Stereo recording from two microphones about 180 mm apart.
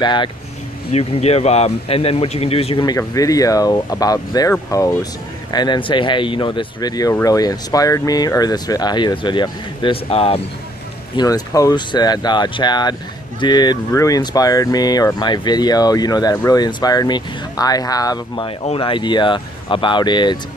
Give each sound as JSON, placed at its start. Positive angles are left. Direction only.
{"t": 0.0, "sound": "speech", "side_deg": 25}
{"t": 0.9, "sound": "speech", "side_deg": 35}
{"t": 11.1, "sound": "speech", "side_deg": 20}